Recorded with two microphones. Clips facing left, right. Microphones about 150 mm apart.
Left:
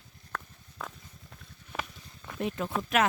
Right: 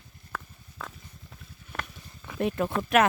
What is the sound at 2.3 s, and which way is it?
Speech, 60° right (ahead or behind).